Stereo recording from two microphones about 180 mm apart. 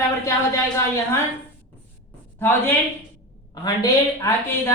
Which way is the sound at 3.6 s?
15° left (ahead or behind).